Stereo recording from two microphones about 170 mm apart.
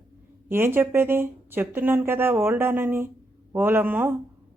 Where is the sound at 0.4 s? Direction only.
15° right (ahead or behind).